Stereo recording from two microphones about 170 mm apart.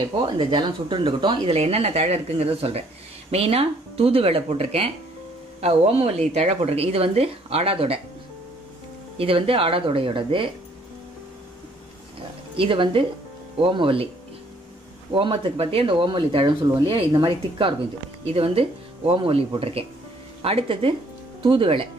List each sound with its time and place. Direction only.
0.0 s speech: 30° right (ahead or behind)
9.2 s speech: 30° right (ahead or behind)
12.5 s speech: 30° right (ahead or behind)
15.1 s speech: 35° right (ahead or behind)